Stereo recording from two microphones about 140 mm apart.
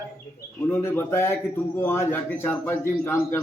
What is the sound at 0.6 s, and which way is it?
A man's voice, 15° left (ahead or behind).